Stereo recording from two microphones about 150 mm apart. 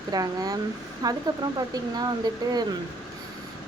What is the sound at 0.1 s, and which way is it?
A woman's voice, 25° right (ahead or behind).